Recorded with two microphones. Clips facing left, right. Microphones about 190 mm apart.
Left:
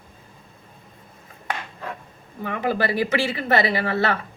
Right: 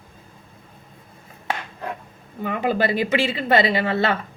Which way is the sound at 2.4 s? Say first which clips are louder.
Right 2 dB; 20° right (ahead or behind).